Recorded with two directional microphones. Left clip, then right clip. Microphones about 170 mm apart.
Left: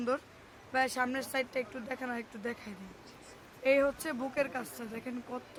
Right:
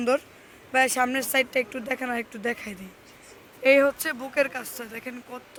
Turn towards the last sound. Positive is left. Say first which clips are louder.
# right 4 dB
turn(degrees=-20)  # may be behind; listen again after turning